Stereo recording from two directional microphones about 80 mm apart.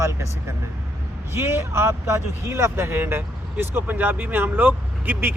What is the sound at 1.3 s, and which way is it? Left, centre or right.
Speech, right.